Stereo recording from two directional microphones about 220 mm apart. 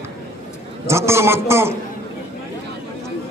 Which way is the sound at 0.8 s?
10° right (ahead or behind).